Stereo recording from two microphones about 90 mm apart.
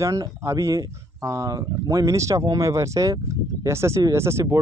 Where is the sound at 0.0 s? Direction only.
35° right (ahead or behind).